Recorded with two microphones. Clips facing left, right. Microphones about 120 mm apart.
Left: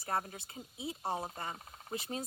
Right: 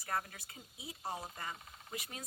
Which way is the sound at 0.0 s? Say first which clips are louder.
Left 3 dB; 30° left (ahead or behind).